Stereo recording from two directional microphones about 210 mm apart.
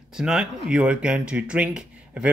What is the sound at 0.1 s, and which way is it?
Speech, 5° right (ahead or behind).